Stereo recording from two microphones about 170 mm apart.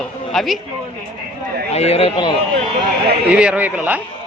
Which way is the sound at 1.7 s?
35° left (ahead or behind).